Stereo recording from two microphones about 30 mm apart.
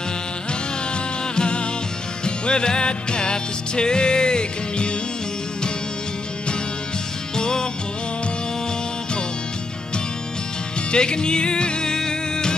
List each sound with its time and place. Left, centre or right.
1.3 s music: left
7.3 s music: left
10.9 s music: left